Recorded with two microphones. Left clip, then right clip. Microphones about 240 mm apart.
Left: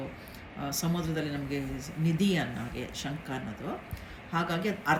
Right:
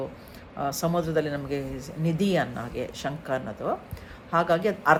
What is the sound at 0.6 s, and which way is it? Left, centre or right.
Speech, centre.